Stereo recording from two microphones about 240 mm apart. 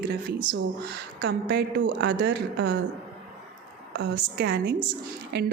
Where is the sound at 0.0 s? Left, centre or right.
Right.